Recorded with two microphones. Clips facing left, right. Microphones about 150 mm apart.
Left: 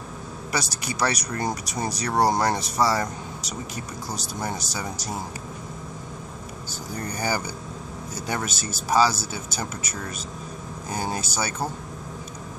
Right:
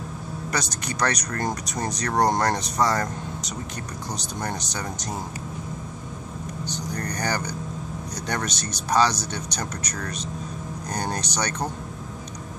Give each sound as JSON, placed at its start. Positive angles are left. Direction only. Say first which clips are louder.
{"t": 0.5, "sound": "speech", "louder": "even", "side_deg": 5}
{"t": 6.9, "sound": "speech", "louder": "left 1 dB", "side_deg": 5}